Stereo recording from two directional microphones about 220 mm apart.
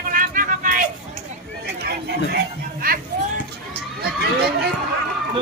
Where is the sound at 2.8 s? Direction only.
40° right (ahead or behind).